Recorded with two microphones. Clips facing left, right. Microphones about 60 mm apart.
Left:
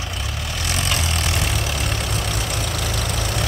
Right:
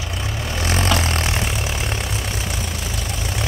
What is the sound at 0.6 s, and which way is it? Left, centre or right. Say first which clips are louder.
Vehicle: right 5 dB; right.